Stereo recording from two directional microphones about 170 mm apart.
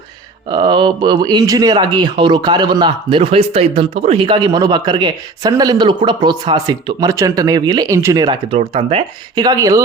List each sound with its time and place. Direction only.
0.5 s speech: 25° right (ahead or behind)